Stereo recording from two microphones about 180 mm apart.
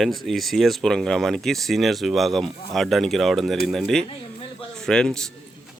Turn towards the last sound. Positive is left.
turn(degrees=5)  # may be behind; listen again after turning